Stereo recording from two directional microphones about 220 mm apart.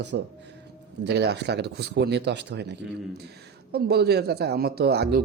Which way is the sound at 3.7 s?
45° right (ahead or behind).